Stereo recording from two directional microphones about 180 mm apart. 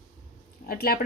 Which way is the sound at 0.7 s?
55° left (ahead or behind).